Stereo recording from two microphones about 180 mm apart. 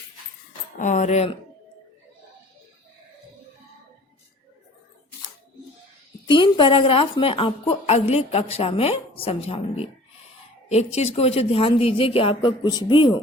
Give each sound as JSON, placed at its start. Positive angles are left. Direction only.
{"t": 0.8, "sound": "a woman's voice", "side_deg": 40}
{"t": 6.2, "sound": "a woman's voice", "side_deg": 25}